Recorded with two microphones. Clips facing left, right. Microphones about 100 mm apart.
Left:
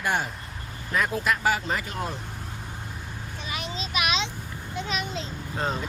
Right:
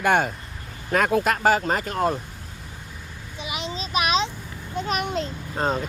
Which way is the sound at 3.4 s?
15° right (ahead or behind).